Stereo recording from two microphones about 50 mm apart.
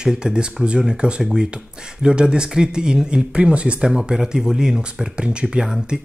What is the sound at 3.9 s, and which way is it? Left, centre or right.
Speech, centre.